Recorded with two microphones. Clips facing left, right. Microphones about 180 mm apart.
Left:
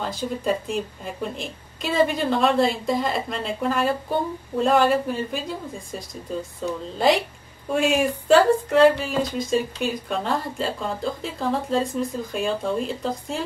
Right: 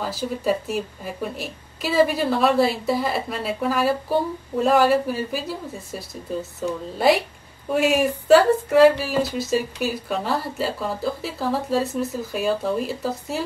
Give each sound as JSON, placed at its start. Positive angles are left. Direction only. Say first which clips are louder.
{"t": 0.0, "sound": "a woman's voice", "louder": "right 1 dB", "side_deg": -5}